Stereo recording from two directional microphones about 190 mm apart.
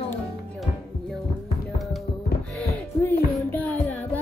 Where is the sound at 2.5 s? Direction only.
10° left (ahead or behind).